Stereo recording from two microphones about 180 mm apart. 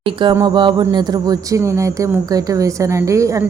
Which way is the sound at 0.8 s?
20° right (ahead or behind).